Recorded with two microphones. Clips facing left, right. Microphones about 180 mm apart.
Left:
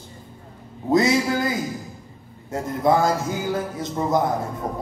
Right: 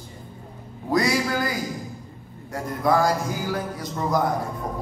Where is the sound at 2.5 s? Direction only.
25° left (ahead or behind).